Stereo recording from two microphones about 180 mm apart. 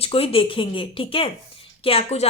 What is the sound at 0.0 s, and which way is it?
Speech, 30° left (ahead or behind).